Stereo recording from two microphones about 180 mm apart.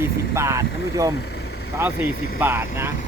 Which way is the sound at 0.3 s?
15° right (ahead or behind).